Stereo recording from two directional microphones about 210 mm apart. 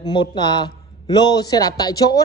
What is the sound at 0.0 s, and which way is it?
A man's voice, 20° left (ahead or behind).